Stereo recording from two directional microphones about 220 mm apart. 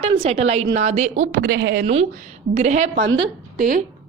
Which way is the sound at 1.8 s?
30° right (ahead or behind).